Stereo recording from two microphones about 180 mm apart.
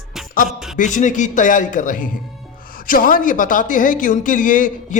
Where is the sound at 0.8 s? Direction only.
45° left (ahead or behind).